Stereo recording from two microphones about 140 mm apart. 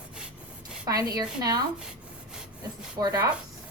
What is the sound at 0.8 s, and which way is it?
Speech, 25° right (ahead or behind).